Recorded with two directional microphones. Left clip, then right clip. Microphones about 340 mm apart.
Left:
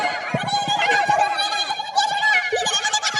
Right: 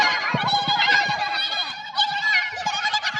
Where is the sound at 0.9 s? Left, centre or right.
Centre.